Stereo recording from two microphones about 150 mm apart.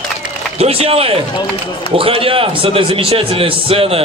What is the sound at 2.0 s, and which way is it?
A man's voice, 40° right (ahead or behind).